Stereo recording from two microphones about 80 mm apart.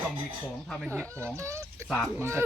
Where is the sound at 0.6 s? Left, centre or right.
Centre.